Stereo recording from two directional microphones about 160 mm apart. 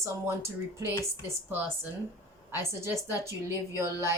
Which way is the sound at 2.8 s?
15° right (ahead or behind).